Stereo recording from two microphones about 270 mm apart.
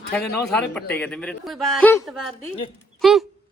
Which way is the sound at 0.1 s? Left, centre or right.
Centre.